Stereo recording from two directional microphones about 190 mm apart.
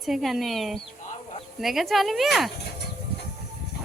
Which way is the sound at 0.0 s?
Centre (ahead or behind).